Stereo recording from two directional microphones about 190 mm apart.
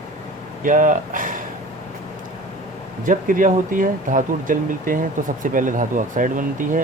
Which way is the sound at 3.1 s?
45° right (ahead or behind).